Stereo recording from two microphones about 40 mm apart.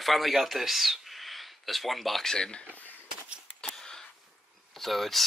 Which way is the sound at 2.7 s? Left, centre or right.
Left.